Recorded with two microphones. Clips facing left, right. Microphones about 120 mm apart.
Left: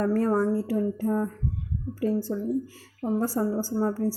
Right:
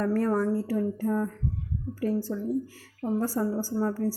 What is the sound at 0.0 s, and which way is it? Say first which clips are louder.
A woman's voice: left 2 dB; 25° left (ahead or behind).